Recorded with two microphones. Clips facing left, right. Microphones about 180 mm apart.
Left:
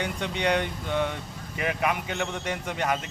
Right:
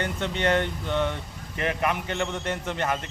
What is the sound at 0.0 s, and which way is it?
A man's voice, 10° left (ahead or behind).